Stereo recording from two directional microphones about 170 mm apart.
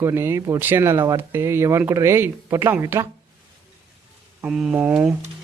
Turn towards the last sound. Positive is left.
turn(degrees=-5)  # may be behind; listen again after turning